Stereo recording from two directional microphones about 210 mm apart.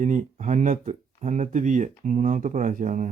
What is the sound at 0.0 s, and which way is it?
Speech, 35° right (ahead or behind).